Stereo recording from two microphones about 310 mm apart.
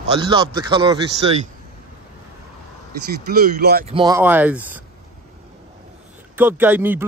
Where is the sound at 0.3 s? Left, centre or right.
Centre.